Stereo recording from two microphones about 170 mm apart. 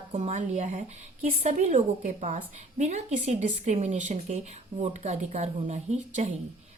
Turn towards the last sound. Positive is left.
turn(degrees=-45)  # may be behind; listen again after turning